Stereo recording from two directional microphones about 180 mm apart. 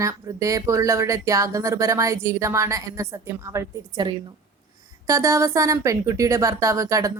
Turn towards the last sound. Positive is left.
turn(degrees=-20)  # may be behind; listen again after turning